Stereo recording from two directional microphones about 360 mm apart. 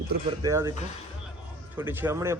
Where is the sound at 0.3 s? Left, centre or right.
Centre.